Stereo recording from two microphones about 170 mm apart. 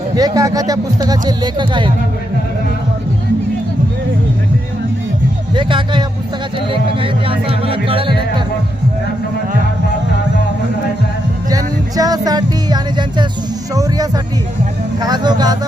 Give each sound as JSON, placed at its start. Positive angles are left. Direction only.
{"t": 0.2, "sound": "music", "side_deg": -20}
{"t": 5.5, "sound": "speech", "side_deg": -30}
{"t": 11.4, "sound": "music", "side_deg": -20}